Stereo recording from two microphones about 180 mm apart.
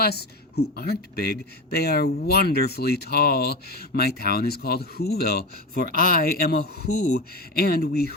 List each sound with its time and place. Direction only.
0.0 s speech: 60° left (ahead or behind)